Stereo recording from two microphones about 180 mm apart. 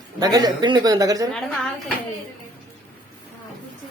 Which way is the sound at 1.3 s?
5° left (ahead or behind).